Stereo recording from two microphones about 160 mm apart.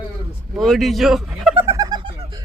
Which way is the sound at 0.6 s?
Centre (ahead or behind).